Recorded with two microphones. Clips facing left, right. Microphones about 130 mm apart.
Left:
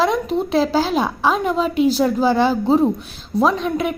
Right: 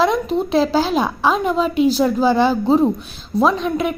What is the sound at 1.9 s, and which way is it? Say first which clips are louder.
Speech: right 1 dB; 15° left (ahead or behind).